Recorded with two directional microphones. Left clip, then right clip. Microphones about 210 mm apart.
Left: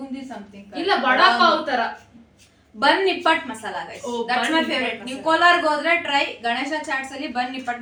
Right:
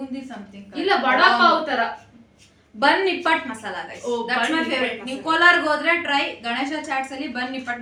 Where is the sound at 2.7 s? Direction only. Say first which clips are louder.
Even; 5° right (ahead or behind).